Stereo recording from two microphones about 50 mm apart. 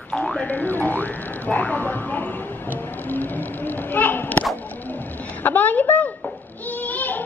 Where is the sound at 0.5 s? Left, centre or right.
Left.